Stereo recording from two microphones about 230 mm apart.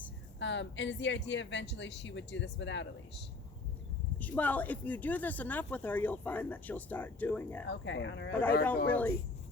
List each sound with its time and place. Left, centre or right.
0.3 s speech: left
4.2 s speech: centre
7.7 s speech: left
8.3 s speech: centre